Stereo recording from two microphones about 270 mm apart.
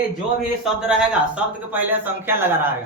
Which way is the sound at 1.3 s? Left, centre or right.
Centre.